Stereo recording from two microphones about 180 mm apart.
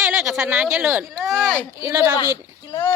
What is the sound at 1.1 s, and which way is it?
Speech, centre (ahead or behind).